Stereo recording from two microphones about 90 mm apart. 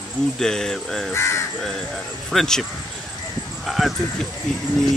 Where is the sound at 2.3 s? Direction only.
5° left (ahead or behind).